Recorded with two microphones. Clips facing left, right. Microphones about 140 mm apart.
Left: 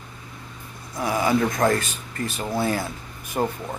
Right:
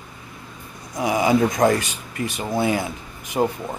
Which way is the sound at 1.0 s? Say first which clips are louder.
Right 3 dB; 15° right (ahead or behind).